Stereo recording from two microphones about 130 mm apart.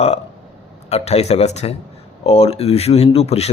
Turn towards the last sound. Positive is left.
turn(degrees=55)  # may be behind; listen again after turning